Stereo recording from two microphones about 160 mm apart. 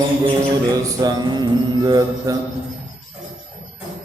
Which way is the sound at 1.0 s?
25° right (ahead or behind).